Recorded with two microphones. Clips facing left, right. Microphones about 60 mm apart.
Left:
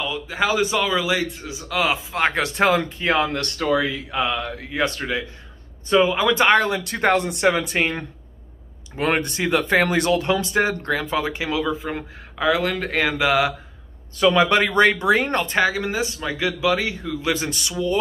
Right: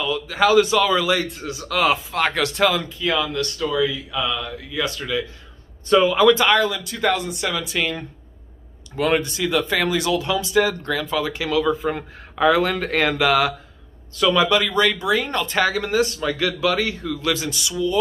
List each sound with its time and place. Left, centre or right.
0.0 s a man's voice: centre
2.1 s speech: left
5.9 s a man's voice: centre
6.3 s speech: left
11.6 s speech: centre
14.1 s speech: left
15.5 s speech: centre
17.3 s speech: left